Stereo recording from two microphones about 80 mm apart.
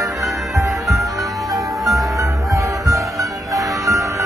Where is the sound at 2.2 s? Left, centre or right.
Right.